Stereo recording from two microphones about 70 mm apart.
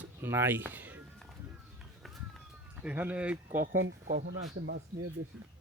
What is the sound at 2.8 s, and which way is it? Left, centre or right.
Speech, right.